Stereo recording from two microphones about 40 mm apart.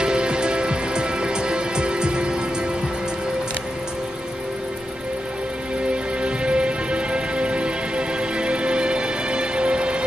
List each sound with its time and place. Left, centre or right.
0.0 s music: right
6.2 s music: right